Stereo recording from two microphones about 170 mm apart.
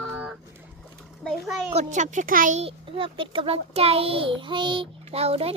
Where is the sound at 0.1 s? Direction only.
10° right (ahead or behind).